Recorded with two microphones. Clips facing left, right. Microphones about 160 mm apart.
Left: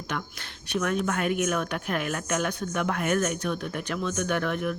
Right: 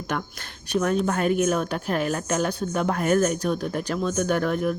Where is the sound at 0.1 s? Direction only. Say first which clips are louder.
Right 4 dB; 45° right (ahead or behind).